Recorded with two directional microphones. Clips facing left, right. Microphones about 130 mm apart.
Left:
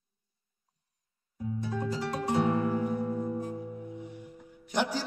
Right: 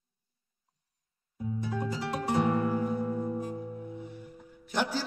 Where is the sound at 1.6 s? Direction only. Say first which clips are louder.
Left 1 dB; 5° right (ahead or behind).